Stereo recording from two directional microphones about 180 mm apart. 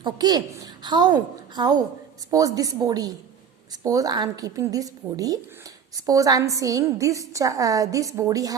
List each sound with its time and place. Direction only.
0.0 s a woman's voice: 25° right (ahead or behind)